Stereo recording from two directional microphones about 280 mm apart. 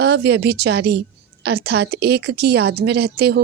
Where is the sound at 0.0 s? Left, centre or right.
Right.